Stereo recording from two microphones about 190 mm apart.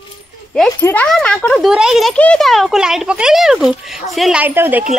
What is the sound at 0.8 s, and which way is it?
A child's voice, 10° left (ahead or behind).